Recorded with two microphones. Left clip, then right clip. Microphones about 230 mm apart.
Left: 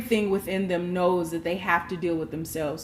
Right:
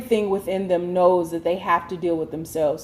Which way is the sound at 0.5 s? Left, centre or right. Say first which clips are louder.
Right 6 dB; left.